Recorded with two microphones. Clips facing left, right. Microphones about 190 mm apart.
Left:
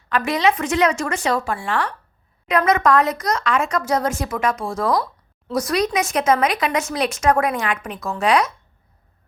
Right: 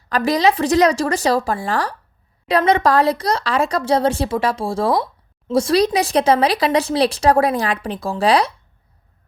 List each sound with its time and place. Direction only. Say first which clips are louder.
0.1 s speech: right 3 dB; 35° right (ahead or behind)